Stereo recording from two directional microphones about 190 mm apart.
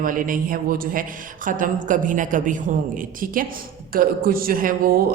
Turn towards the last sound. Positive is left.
turn(degrees=-50)  # may be behind; listen again after turning